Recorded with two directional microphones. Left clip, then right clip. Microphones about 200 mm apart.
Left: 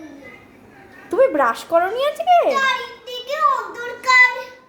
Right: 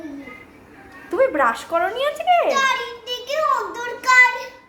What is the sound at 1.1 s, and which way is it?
Speech, 25° left (ahead or behind).